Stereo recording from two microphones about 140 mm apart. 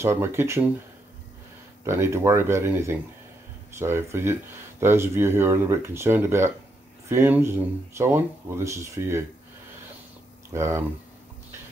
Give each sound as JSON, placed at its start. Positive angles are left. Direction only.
{"t": 0.0, "sound": "speech", "side_deg": -20}
{"t": 1.9, "sound": "speech", "side_deg": -20}
{"t": 10.5, "sound": "speech", "side_deg": -20}